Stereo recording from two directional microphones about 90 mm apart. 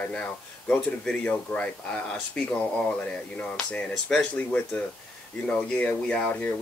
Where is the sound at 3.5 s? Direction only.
10° left (ahead or behind).